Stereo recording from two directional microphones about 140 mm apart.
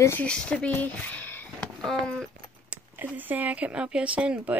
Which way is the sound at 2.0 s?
5° left (ahead or behind).